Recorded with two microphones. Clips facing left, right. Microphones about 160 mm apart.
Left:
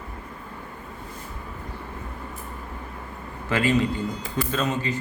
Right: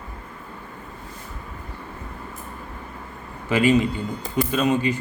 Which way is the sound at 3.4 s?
15° right (ahead or behind).